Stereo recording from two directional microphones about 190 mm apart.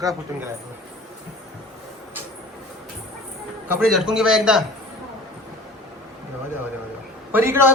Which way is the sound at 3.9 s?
Centre (ahead or behind).